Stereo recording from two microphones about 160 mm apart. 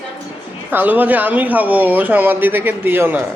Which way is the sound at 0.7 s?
10° right (ahead or behind).